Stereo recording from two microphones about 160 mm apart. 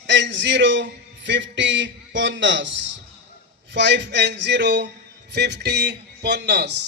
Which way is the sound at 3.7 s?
90° right.